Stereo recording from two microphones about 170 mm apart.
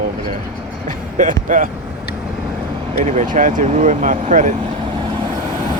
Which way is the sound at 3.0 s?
45° right (ahead or behind).